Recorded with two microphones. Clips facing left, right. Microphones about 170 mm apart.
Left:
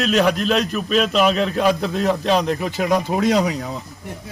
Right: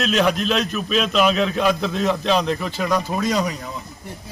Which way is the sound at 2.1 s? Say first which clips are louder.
Left 2 dB; 40° left (ahead or behind).